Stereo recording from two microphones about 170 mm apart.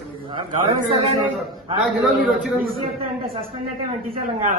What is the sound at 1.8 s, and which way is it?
Speech, centre (ahead or behind).